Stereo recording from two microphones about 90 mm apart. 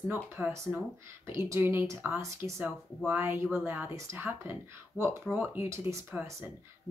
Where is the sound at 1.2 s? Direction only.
30° right (ahead or behind).